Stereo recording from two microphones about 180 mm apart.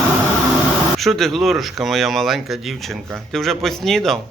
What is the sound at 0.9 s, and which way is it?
A man's voice, centre (ahead or behind).